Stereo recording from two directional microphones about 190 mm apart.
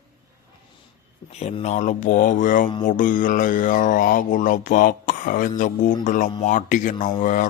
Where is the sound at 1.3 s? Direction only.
35° left (ahead or behind).